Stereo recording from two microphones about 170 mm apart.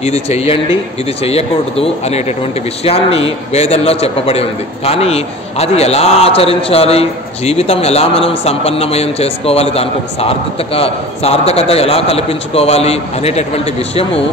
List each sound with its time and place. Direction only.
0.0 s a man's voice: 40° left (ahead or behind)